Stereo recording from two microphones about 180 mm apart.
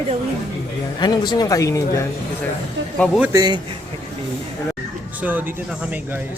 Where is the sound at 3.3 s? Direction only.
20° right (ahead or behind).